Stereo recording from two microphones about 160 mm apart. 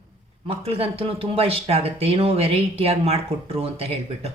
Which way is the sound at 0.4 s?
35° right (ahead or behind).